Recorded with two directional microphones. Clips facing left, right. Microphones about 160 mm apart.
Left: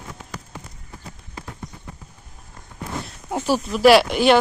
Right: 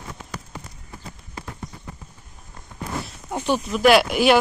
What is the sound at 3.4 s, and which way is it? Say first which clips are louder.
Speech: left 2 dB; 5° left (ahead or behind).